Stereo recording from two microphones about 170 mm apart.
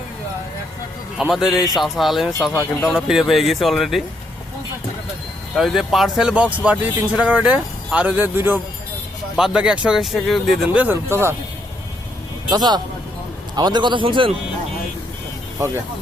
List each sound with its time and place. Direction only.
1.2 s speech: 5° right (ahead or behind)
5.5 s speech: centre (ahead or behind)
12.5 s a man's voice: 25° right (ahead or behind)